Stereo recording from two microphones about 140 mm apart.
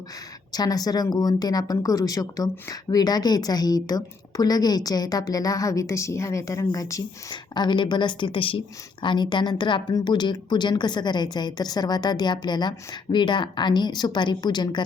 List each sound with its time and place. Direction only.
0.5 s speech: 30° left (ahead or behind)